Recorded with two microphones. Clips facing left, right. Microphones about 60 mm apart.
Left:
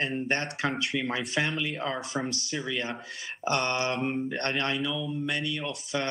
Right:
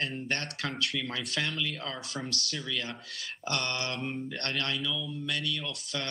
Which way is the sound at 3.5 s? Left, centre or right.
Centre.